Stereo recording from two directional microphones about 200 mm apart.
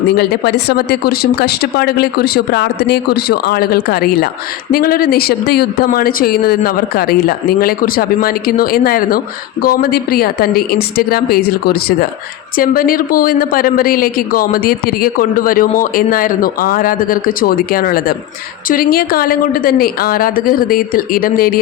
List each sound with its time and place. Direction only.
0.2 s speech: 55° left (ahead or behind)